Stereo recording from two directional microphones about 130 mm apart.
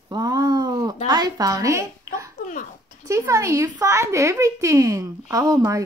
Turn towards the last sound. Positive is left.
turn(degrees=-30)  # may be behind; listen again after turning